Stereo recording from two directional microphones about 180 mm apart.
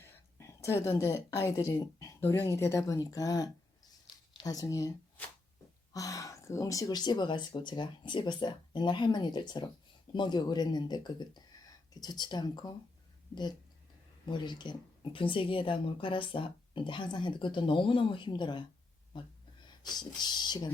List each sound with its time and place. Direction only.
0.0 s speech: 15° left (ahead or behind)
4.0 s a sound: 25° left (ahead or behind)
5.9 s speech: 20° left (ahead or behind)
14.3 s speech: 25° left (ahead or behind)
19.8 s speech: 25° left (ahead or behind)